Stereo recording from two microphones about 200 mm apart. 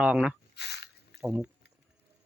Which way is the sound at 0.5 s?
55° left (ahead or behind).